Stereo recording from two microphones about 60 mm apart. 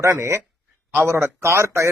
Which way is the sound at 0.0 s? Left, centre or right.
Right.